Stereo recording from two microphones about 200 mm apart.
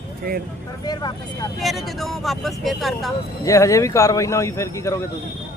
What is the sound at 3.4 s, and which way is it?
Speech, 15° left (ahead or behind).